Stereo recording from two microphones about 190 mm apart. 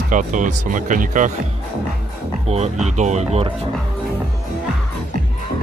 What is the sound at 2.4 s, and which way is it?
Speech, 35° right (ahead or behind).